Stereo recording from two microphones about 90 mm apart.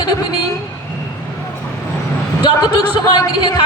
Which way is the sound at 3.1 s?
55° left (ahead or behind).